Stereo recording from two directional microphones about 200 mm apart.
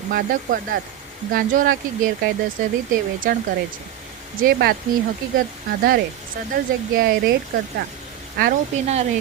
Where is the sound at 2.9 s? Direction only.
45° right (ahead or behind).